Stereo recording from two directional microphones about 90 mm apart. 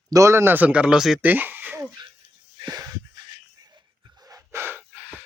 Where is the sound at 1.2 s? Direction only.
20° right (ahead or behind).